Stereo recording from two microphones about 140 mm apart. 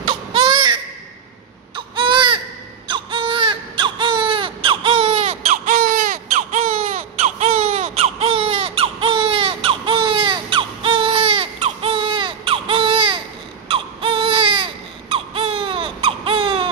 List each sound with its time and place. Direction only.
0.0 s baby cry: 40° right (ahead or behind)
1.8 s baby cry: 35° right (ahead or behind)
5.7 s baby cry: 80° right
6.3 s baby cry: 50° right (ahead or behind)